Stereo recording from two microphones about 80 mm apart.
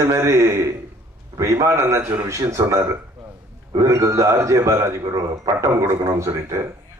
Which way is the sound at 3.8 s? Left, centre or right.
Right.